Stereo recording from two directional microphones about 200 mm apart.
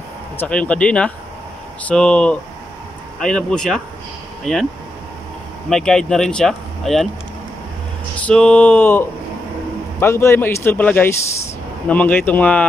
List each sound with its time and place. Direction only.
0.4 s speech: 5° left (ahead or behind)
5.7 s speech: 5° left (ahead or behind)
8.3 s speech: 5° left (ahead or behind)